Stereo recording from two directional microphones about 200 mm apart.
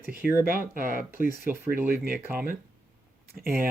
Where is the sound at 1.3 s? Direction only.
10° right (ahead or behind).